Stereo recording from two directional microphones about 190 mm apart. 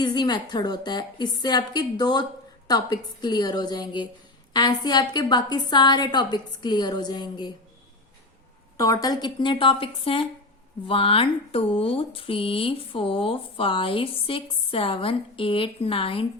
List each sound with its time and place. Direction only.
0.0 s speech: 20° left (ahead or behind)
8.8 s speech: 20° left (ahead or behind)